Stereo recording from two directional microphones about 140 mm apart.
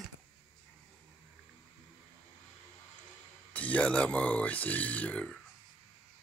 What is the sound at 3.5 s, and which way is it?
Speech, 10° left (ahead or behind).